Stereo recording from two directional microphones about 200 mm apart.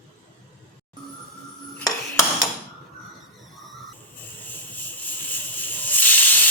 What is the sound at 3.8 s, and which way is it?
Cricket, 10° left (ahead or behind).